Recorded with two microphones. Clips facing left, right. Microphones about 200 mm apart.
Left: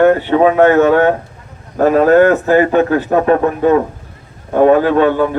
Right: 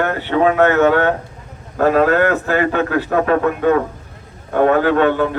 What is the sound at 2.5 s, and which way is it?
Speech, 20° left (ahead or behind).